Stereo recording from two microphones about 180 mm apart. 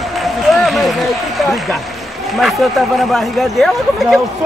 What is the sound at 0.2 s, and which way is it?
Run, centre (ahead or behind).